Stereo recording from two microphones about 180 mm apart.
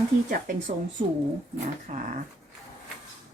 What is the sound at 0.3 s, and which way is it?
Speech, 50° right (ahead or behind).